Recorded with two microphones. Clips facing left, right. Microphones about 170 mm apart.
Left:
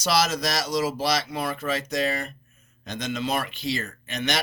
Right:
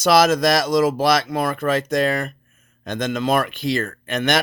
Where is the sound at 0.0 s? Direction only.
55° right (ahead or behind).